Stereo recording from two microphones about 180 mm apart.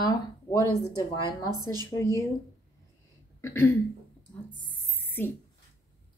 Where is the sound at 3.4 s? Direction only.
15° left (ahead or behind).